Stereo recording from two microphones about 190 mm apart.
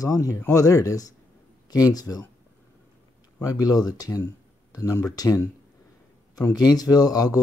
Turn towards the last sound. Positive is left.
turn(degrees=20)  # may be behind; listen again after turning